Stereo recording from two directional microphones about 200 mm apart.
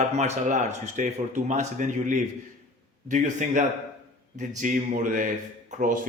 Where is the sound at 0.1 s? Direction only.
35° right (ahead or behind).